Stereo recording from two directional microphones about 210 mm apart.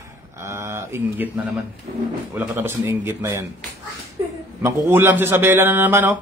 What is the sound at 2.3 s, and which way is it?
A man's voice, 10° right (ahead or behind).